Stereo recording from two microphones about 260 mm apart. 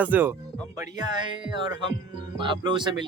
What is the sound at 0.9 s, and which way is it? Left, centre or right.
Speech, centre.